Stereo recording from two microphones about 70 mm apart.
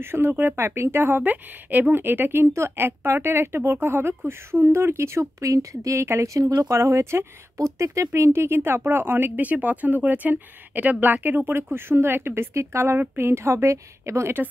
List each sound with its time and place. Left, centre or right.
0.0 s speech: right